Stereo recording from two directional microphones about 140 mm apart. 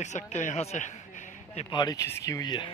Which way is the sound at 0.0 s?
55° left (ahead or behind).